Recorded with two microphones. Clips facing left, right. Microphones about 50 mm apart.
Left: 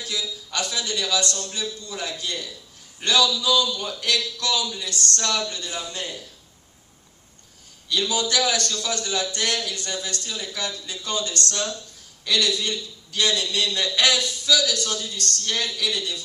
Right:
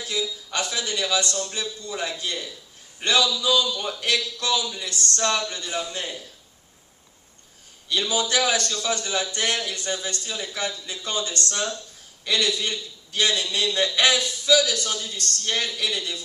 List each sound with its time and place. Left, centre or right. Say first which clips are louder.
0.0 s a man's voice: right 2 dB; right
8.0 s a man's voice: even; right